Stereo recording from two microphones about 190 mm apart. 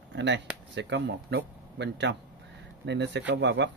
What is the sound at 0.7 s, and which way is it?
Speech, 70° right (ahead or behind).